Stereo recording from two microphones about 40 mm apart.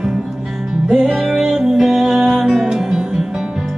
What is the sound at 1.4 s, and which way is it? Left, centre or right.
Music, centre.